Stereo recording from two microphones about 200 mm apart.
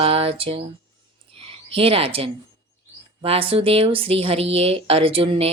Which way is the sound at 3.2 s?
30° right (ahead or behind).